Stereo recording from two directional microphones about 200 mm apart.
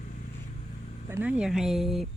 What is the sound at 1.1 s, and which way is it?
Speech, 5° right (ahead or behind).